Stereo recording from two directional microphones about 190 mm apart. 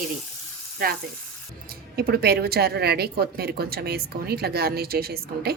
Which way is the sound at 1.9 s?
55° right (ahead or behind).